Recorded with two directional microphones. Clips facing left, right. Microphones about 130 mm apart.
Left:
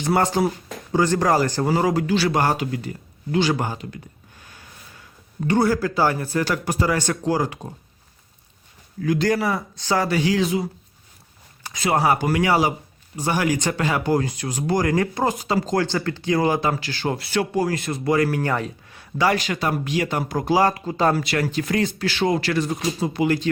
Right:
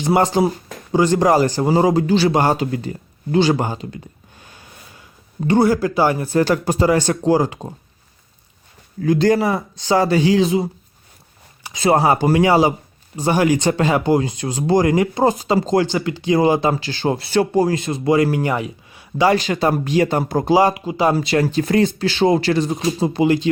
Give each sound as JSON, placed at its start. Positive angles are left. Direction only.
{"t": 0.0, "sound": "a man's voice", "side_deg": -25}
{"t": 6.3, "sound": "a man's voice", "side_deg": -30}
{"t": 9.0, "sound": "a man's voice", "side_deg": -30}
{"t": 11.7, "sound": "a man's voice", "side_deg": -30}
{"t": 18.5, "sound": "speech", "side_deg": -5}
{"t": 19.1, "sound": "a man's voice", "side_deg": -25}
{"t": 21.2, "sound": "a man's voice", "side_deg": -25}